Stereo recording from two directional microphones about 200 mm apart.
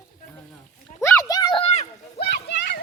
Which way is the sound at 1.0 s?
15° left (ahead or behind).